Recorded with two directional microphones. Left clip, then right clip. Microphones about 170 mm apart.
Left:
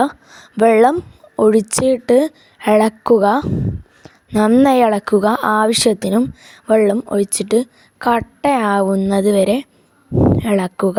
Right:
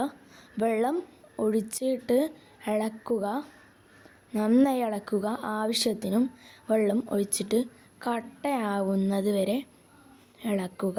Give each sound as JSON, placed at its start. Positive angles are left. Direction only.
{"t": 0.0, "sound": "speech", "side_deg": 55}